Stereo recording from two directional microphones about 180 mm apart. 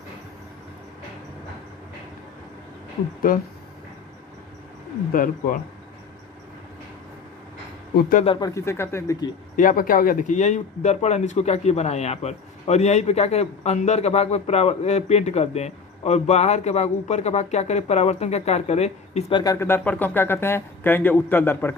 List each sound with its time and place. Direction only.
3.3 s speech: 50° left (ahead or behind)
5.1 s speech: 50° left (ahead or behind)
8.2 s speech: 30° left (ahead or behind)
8.4 s speech: 15° left (ahead or behind)
9.6 s speech: 50° left (ahead or behind)
19.3 s speech: 20° left (ahead or behind)